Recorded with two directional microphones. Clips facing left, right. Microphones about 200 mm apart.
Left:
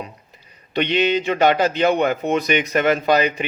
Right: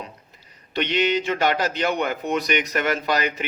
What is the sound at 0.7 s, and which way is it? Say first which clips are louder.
Speech: left 3 dB; 20° left (ahead or behind).